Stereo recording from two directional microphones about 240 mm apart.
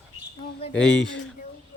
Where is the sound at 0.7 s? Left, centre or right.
Centre.